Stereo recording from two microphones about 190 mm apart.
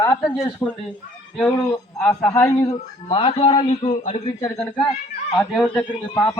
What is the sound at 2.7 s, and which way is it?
Speech, 25° left (ahead or behind).